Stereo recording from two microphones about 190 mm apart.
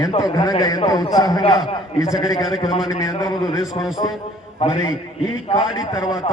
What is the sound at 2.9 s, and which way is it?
A man's voice, 20° left (ahead or behind).